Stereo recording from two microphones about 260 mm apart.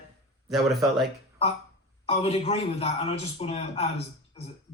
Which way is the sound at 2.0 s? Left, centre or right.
Left.